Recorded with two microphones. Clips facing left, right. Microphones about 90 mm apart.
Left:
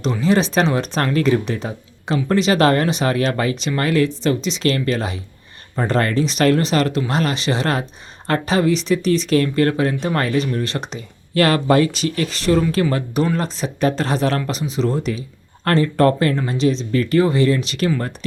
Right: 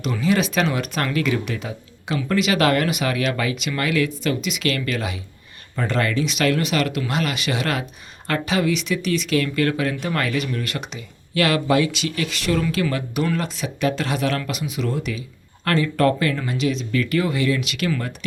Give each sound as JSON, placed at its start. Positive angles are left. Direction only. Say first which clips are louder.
{"t": 0.0, "sound": "speech", "louder": "left 3 dB", "side_deg": 30}